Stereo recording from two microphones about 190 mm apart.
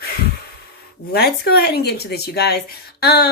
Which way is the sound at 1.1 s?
55° left (ahead or behind).